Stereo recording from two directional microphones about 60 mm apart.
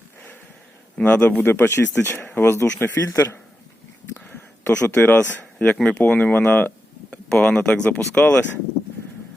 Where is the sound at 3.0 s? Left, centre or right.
Left.